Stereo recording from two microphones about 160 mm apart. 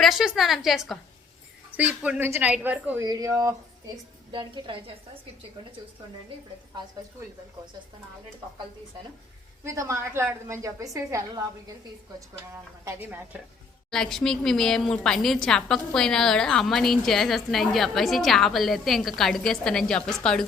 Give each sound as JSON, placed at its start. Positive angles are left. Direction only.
{"t": 0.0, "sound": "a woman's voice", "side_deg": 0}
{"t": 3.0, "sound": "a woman's voice", "side_deg": -20}
{"t": 9.6, "sound": "a woman's voice", "side_deg": -20}
{"t": 12.8, "sound": "a woman's voice", "side_deg": -15}
{"t": 13.9, "sound": "a woman's voice", "side_deg": 5}